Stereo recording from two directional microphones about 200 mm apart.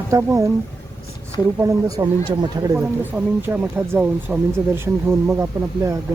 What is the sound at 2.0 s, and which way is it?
Speech, 20° right (ahead or behind).